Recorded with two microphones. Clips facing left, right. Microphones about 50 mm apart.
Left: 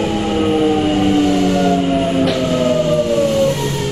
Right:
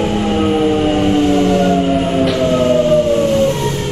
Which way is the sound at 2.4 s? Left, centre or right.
Right.